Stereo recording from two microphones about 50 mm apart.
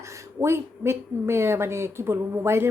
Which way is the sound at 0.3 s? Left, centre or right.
Right.